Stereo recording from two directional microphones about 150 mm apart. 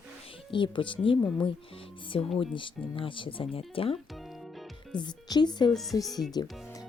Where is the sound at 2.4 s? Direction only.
35° left (ahead or behind).